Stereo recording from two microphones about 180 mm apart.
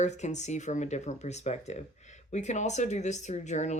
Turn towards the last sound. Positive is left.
turn(degrees=40)  # may be behind; listen again after turning